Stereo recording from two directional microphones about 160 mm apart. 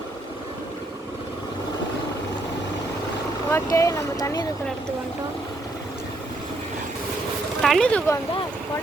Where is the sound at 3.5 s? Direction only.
20° left (ahead or behind).